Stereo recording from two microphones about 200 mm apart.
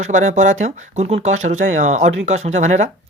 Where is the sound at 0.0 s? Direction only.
35° right (ahead or behind).